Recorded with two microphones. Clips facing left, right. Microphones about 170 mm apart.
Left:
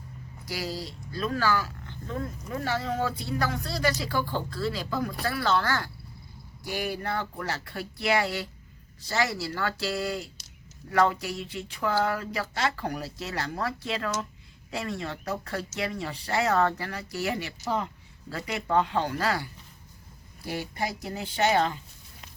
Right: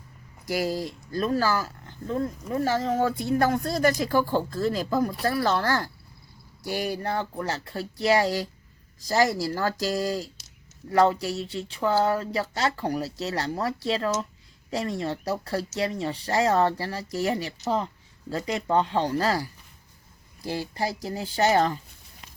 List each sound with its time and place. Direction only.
0.4 s speech: 50° right (ahead or behind)